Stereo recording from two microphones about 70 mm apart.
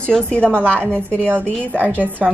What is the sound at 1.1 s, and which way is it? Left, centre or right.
A woman's voice, right.